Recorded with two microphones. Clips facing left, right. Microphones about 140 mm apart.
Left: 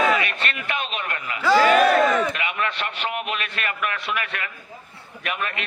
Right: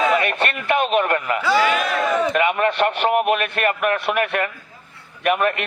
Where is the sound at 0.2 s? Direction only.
55° right (ahead or behind).